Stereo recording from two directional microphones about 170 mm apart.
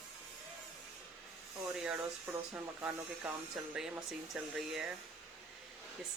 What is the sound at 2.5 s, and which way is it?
Speech, 10° right (ahead or behind).